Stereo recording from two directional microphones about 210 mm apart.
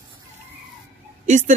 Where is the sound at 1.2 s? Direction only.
35° right (ahead or behind).